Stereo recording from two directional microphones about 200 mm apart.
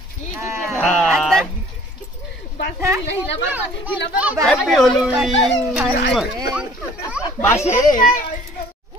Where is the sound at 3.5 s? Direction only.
10° right (ahead or behind).